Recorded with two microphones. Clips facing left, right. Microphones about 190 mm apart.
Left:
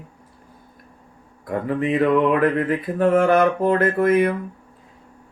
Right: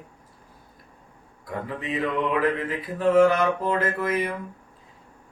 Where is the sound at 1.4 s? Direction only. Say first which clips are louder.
Left 9 dB; 55° left (ahead or behind).